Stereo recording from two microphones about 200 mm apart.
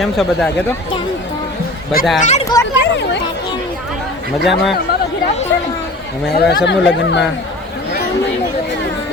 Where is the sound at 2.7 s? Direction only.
60° left (ahead or behind).